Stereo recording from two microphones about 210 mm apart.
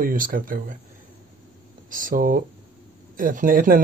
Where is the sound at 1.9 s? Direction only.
40° right (ahead or behind).